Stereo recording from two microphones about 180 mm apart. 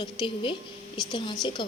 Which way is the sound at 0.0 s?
25° left (ahead or behind).